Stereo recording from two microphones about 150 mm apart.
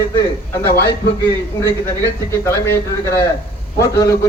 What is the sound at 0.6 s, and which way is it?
Speech, 90° left.